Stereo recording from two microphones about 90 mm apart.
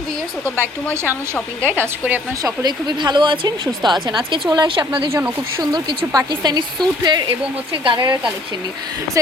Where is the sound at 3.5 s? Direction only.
55° right (ahead or behind); by 5.1 s 75° right (ahead or behind).